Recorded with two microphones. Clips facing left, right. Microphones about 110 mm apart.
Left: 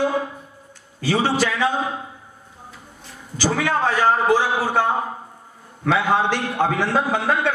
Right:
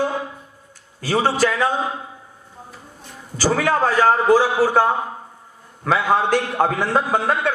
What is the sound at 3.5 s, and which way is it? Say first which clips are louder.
A man's voice: right 3 dB; 45° right (ahead or behind).